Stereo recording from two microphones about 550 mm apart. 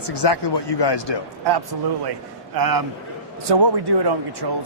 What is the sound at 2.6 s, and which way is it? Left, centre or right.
A man's voice, right.